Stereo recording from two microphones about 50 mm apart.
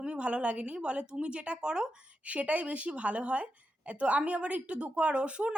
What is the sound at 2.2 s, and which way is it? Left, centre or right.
Speech, right.